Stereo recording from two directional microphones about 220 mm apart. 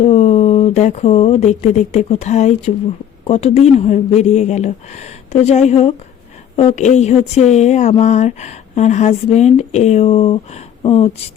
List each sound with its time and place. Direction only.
0.0 s speech: 30° left (ahead or behind)